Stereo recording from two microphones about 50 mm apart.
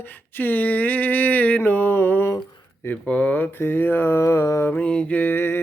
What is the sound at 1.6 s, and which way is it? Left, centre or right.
Mantra, left.